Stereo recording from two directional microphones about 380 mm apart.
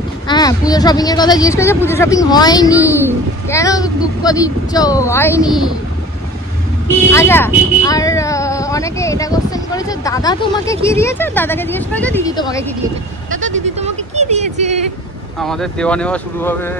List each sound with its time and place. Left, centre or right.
0.3 s speech: centre
7.1 s speech: centre
13.3 s sheep: right
13.7 s speech: centre
15.4 s speech: centre